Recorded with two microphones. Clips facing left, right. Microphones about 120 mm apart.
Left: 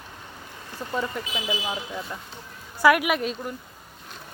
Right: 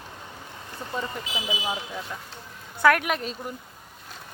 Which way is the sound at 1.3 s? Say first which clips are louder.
Even; 15° right (ahead or behind).